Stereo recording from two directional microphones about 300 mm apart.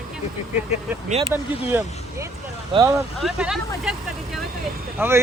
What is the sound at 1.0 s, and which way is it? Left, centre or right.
Speech, right.